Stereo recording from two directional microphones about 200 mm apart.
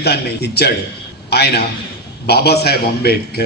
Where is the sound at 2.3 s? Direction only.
55° left (ahead or behind).